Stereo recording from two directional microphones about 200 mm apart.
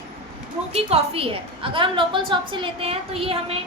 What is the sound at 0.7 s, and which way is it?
A woman's voice, 30° right (ahead or behind).